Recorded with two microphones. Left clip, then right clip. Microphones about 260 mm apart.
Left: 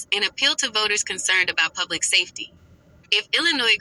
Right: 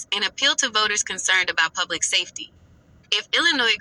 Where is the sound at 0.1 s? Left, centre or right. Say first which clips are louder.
Even; right.